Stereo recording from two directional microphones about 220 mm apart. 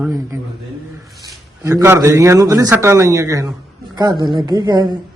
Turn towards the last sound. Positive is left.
turn(degrees=-20)  # may be behind; listen again after turning